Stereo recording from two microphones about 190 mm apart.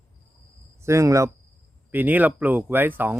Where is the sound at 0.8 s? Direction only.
15° right (ahead or behind).